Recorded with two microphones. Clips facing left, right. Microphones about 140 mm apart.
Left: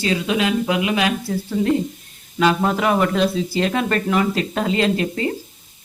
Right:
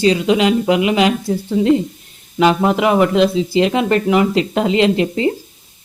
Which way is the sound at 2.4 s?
20° right (ahead or behind).